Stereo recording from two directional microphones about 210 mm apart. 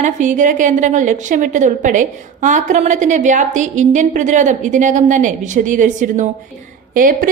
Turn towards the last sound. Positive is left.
turn(degrees=-40)  # may be behind; listen again after turning